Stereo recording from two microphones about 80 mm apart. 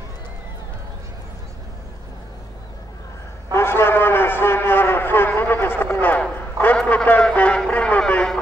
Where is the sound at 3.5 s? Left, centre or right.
Left.